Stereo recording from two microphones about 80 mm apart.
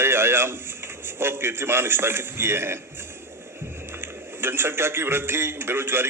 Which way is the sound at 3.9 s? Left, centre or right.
Right.